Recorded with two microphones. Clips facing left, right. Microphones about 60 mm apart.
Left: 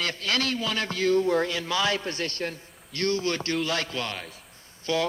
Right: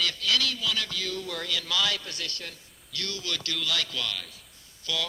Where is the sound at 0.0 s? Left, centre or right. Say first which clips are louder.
Left 1 dB; left.